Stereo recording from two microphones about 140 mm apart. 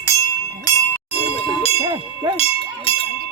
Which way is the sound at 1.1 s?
40° left (ahead or behind).